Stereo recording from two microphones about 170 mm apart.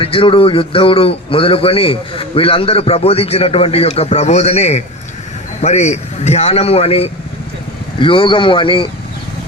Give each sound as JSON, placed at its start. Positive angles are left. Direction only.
{"t": 0.0, "sound": "a man's voice", "side_deg": 30}